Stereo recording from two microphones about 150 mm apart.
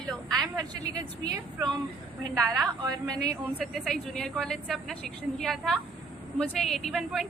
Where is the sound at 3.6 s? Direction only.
Centre (ahead or behind).